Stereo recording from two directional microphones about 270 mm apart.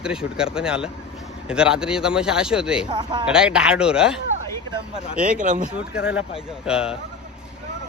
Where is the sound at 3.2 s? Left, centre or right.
Centre.